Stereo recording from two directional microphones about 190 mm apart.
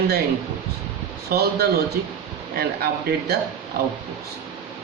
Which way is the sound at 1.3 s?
55° right (ahead or behind).